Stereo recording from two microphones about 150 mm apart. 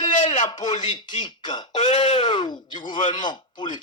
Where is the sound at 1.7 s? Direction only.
45° left (ahead or behind).